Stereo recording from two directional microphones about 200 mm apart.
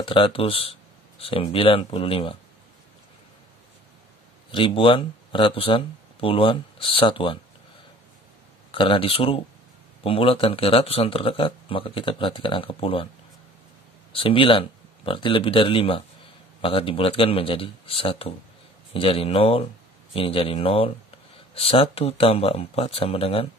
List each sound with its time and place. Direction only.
0.0 s speech: 25° left (ahead or behind)
4.5 s speech: 25° left (ahead or behind)
8.7 s speech: 25° left (ahead or behind)
14.1 s speech: 25° left (ahead or behind)